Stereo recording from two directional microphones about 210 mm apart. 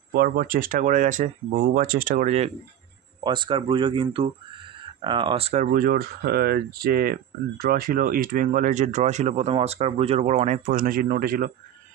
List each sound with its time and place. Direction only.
0.1 s speech: 45° right (ahead or behind)
3.3 s speech: 25° right (ahead or behind); by 11.5 s 45° right (ahead or behind)